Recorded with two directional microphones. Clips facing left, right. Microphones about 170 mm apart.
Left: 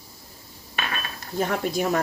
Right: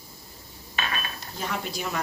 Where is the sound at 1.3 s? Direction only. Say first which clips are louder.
Left 8 dB; 50° left (ahead or behind).